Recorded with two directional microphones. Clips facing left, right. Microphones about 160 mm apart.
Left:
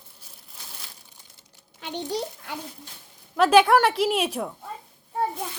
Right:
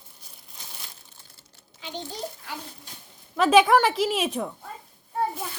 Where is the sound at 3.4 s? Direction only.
Centre (ahead or behind).